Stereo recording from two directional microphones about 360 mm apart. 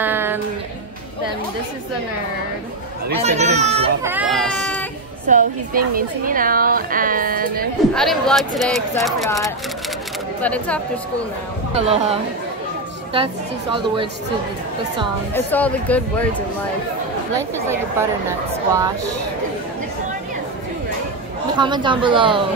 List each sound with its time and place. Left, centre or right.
0.0 s music: centre
3.2 s speech: centre
4.1 s speech: centre
5.3 s a woman's voice: right
7.9 s speech: centre
11.7 s speech: centre
15.3 s speech: centre
17.4 s speech: centre
21.5 s speech: centre